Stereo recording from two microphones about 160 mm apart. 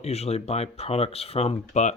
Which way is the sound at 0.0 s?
40° left (ahead or behind).